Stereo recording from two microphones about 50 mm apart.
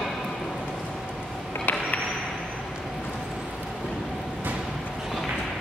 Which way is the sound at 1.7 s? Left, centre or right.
Left.